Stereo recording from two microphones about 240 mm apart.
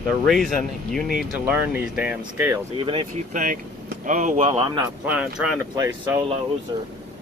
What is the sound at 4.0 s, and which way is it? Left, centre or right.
Speech, right.